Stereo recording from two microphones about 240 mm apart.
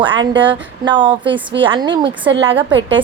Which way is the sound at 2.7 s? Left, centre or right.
Right.